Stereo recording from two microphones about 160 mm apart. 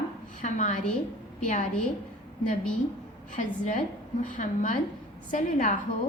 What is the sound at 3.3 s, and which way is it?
A woman's voice, 50° left (ahead or behind).